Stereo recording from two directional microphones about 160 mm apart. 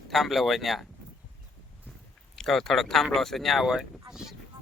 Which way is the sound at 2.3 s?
Centre (ahead or behind).